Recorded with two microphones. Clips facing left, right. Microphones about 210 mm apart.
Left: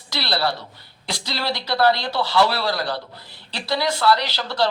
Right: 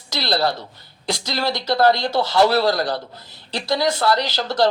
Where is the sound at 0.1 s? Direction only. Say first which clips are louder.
Right 3 dB; 45° right (ahead or behind).